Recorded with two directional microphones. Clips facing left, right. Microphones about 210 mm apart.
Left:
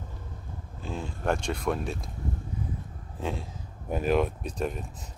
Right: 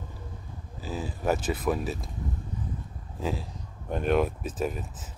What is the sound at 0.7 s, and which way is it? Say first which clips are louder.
Speech: right 2 dB; 5° right (ahead or behind).